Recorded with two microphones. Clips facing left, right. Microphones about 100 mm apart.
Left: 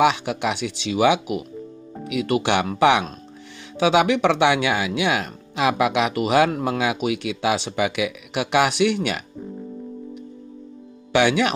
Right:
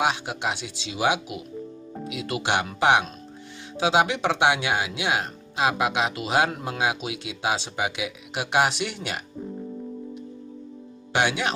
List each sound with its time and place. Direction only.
0.0 s speech: 70° left (ahead or behind)
11.1 s speech: 65° left (ahead or behind)